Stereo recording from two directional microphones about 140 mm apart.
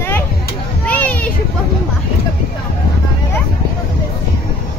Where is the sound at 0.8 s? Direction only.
10° left (ahead or behind).